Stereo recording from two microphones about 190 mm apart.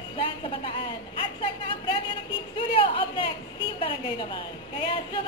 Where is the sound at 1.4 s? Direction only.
25° left (ahead or behind).